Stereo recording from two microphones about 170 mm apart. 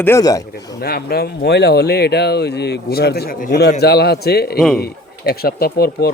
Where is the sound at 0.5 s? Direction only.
65° left (ahead or behind).